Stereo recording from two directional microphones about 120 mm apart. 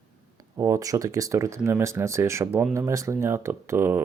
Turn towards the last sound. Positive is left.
turn(degrees=-20)  # may be behind; listen again after turning